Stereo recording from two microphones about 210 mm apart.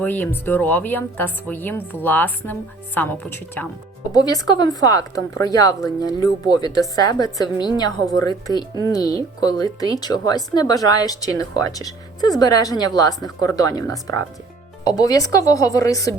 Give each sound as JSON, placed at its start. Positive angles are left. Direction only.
{"t": 0.0, "sound": "a woman's voice", "side_deg": 10}